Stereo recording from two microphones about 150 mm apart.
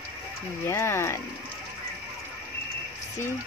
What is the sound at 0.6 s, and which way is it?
Speech, 15° left (ahead or behind).